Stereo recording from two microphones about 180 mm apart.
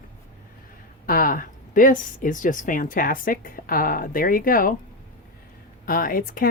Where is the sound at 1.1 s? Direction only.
50° left (ahead or behind).